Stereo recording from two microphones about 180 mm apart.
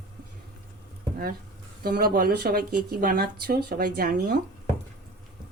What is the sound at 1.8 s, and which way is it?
Speech, 60° right (ahead or behind).